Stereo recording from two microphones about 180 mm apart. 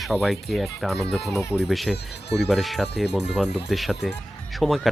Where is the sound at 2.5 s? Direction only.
Centre (ahead or behind).